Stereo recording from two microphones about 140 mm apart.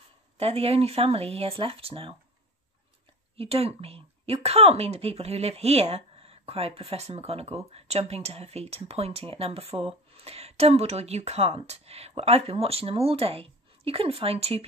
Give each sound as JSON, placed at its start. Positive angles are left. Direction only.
{"t": 0.4, "sound": "speech", "side_deg": -45}
{"t": 3.3, "sound": "speech", "side_deg": -45}